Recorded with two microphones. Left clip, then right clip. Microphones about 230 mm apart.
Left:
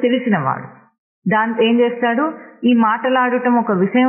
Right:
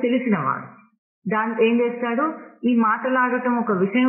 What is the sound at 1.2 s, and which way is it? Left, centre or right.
Speech, left.